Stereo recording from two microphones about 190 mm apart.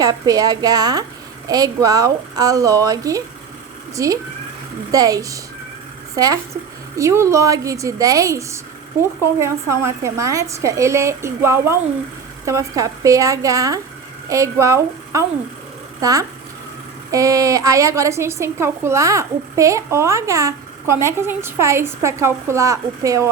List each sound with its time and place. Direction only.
0.0 s a woman's voice: 20° right (ahead or behind)